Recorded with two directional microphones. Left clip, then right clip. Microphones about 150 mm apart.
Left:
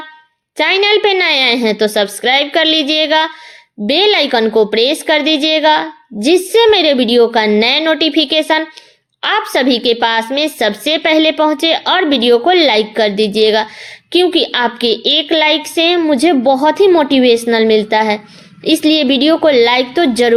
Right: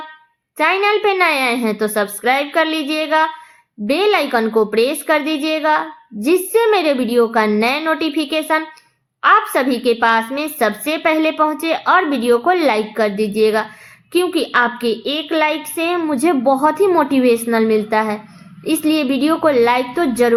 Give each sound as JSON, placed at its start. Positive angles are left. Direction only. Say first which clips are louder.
{"t": 0.5, "sound": "a woman's voice", "louder": "left 4 dB", "side_deg": 30}